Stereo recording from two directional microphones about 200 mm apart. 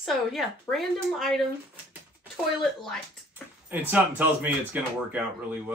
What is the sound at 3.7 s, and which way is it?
Speech, 10° right (ahead or behind).